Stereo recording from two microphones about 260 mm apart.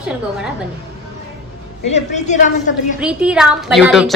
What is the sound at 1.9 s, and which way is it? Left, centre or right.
Speech, left.